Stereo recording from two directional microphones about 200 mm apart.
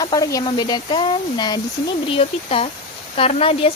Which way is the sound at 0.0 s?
20° left (ahead or behind).